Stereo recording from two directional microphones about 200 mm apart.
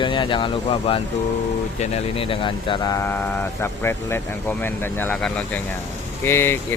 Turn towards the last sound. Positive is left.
turn(degrees=10)  # may be behind; listen again after turning